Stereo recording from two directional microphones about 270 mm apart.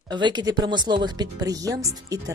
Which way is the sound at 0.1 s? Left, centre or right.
Centre.